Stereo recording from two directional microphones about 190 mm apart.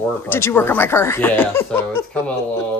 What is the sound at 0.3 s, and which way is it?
Speech, 15° left (ahead or behind).